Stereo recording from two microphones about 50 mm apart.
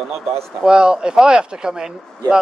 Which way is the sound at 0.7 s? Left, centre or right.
Centre.